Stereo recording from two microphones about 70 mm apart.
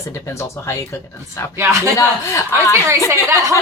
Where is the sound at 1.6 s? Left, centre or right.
Right.